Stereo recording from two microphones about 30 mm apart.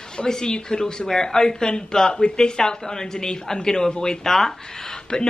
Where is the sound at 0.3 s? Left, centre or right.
Left.